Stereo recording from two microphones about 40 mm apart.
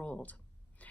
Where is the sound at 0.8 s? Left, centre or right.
Left.